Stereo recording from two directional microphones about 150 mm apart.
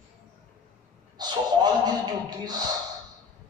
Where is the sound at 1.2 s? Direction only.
30° right (ahead or behind).